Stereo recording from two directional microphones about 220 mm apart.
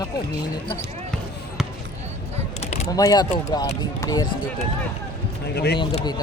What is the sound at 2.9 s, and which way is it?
Speech, 15° left (ahead or behind).